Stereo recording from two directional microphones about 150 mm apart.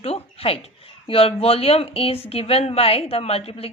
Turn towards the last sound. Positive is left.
turn(degrees=40)  # may be behind; listen again after turning